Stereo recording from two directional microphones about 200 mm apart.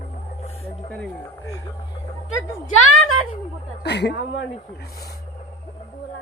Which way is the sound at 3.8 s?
55° left (ahead or behind).